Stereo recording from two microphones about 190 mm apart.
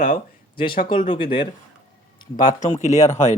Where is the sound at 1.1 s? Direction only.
25° left (ahead or behind).